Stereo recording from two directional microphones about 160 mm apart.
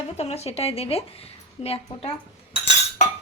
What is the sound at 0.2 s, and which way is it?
Speech, 40° left (ahead or behind).